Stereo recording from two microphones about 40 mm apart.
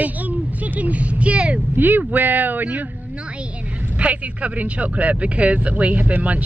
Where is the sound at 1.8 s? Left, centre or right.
Right.